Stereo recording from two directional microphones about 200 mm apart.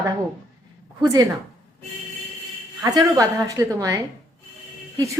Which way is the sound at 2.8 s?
20° right (ahead or behind).